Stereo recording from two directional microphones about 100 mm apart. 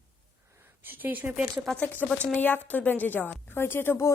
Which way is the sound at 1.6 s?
10° left (ahead or behind).